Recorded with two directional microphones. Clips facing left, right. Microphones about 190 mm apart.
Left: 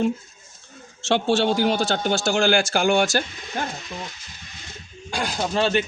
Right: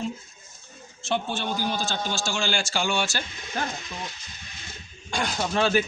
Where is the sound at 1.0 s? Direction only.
85° left; by 3.2 s 50° left (ahead or behind).